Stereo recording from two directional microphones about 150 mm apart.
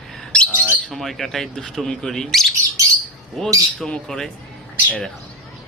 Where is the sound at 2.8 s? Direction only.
20° right (ahead or behind).